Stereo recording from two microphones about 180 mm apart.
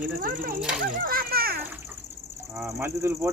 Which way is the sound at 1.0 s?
55° right (ahead or behind).